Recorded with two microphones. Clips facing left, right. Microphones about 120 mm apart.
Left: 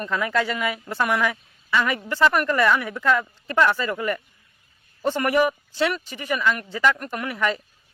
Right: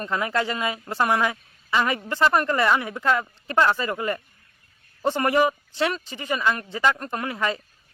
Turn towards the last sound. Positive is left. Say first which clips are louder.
# left 1 dB
turn(degrees=-25)  # may be behind; listen again after turning